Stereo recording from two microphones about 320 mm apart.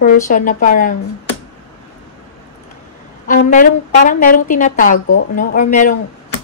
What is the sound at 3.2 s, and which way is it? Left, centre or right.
A woman's voice, left.